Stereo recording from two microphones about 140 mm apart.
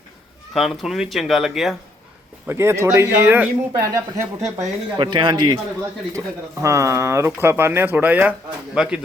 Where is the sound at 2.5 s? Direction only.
20° right (ahead or behind).